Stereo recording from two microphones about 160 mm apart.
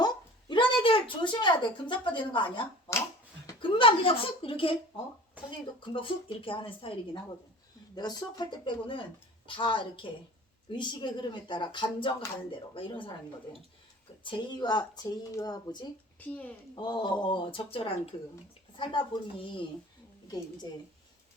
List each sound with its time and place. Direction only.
0.0 s a sound: 30° left (ahead or behind)
3.4 s a woman's voice: 30° left (ahead or behind)
14.3 s a woman's voice: 30° left (ahead or behind)
16.2 s speech: 10° left (ahead or behind)
16.7 s a woman's voice: 25° left (ahead or behind)